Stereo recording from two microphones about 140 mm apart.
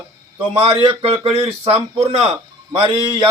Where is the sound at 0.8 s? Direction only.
35° right (ahead or behind).